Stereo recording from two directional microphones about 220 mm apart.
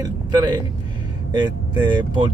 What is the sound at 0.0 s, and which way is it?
Speech, 20° right (ahead or behind).